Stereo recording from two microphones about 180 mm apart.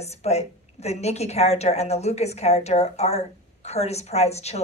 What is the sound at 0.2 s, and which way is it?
A woman's voice, 35° left (ahead or behind).